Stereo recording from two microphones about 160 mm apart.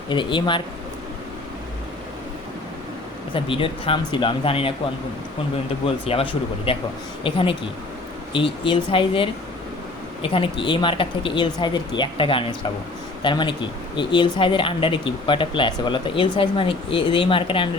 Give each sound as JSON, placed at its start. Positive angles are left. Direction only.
{"t": 0.1, "sound": "speech", "side_deg": 30}
{"t": 3.3, "sound": "speech", "side_deg": 30}
{"t": 5.8, "sound": "speech", "side_deg": 35}